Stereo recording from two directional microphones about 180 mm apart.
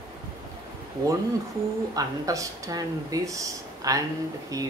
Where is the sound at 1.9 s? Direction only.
20° right (ahead or behind).